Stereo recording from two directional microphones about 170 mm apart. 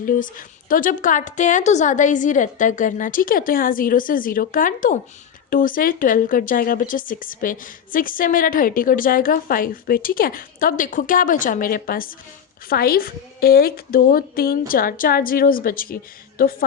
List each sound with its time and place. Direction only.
0.0 s a woman's voice: 55° left (ahead or behind)